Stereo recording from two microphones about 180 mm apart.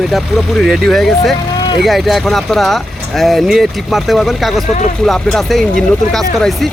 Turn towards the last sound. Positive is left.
turn(degrees=0)  # may be behind; listen again after turning